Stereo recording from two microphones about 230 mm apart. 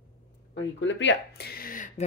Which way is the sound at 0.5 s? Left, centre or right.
Left.